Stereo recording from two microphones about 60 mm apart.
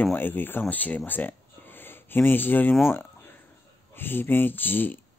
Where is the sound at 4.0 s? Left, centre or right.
Left.